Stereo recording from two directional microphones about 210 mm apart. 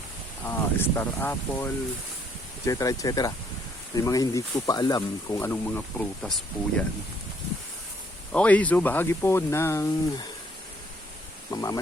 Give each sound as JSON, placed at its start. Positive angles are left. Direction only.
{"t": 0.4, "sound": "speech", "side_deg": 10}
{"t": 8.3, "sound": "speech", "side_deg": 5}
{"t": 11.5, "sound": "speech", "side_deg": 15}